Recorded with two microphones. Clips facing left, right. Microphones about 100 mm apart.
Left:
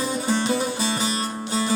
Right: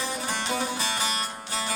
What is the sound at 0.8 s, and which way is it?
Music, 30° left (ahead or behind).